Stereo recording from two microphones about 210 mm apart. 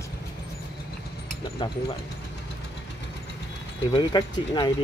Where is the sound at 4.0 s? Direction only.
20° left (ahead or behind).